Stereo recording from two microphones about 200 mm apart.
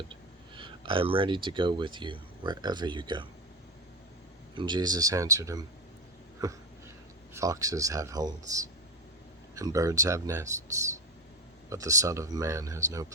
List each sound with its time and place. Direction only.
0.1 s speech: 25° right (ahead or behind)
4.5 s speech: 20° right (ahead or behind)
6.4 s a sound: 15° right (ahead or behind)
7.3 s speech: 15° right (ahead or behind)